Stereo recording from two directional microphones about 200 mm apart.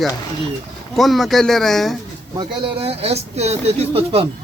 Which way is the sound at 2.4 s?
30° right (ahead or behind).